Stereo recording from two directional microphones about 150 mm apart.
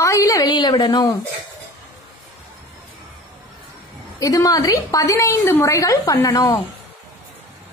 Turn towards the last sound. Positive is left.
turn(degrees=30)  # may be behind; listen again after turning